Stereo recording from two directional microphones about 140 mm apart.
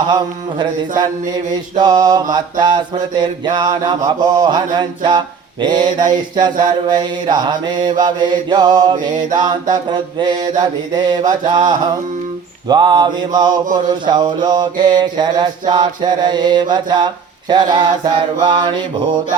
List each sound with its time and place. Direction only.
0.1 s mantra: 30° right (ahead or behind)